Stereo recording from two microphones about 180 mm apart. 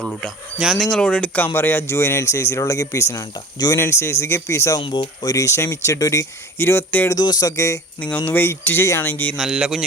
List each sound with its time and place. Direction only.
0.0 s speech: centre (ahead or behind); by 4.8 s 15° left (ahead or behind)
4.8 s speech: 25° left (ahead or behind)
9.3 s speech: centre (ahead or behind)